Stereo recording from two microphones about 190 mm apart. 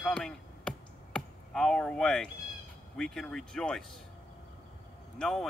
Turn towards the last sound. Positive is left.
turn(degrees=0)  # may be behind; listen again after turning